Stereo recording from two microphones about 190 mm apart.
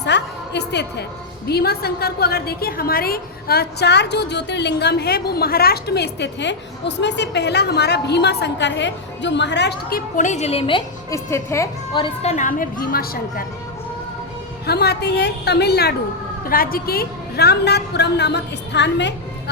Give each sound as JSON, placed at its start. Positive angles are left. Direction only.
{"t": 0.0, "sound": "music", "side_deg": 65}
{"t": 1.5, "sound": "a woman's voice", "side_deg": 55}
{"t": 10.2, "sound": "a woman's voice", "side_deg": 40}
{"t": 11.1, "sound": "a woman's voice", "side_deg": 15}
{"t": 12.0, "sound": "a woman's voice", "side_deg": 35}
{"t": 14.7, "sound": "a woman's voice", "side_deg": 55}